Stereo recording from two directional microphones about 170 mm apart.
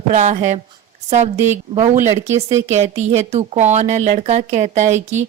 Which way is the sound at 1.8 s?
50° right (ahead or behind).